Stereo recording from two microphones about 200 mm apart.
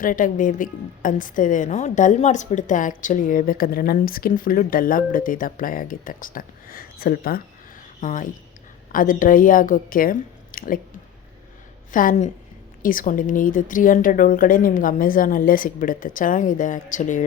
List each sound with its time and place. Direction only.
0.0 s a woman's voice: 40° left (ahead or behind)
11.9 s a woman's voice: 40° left (ahead or behind)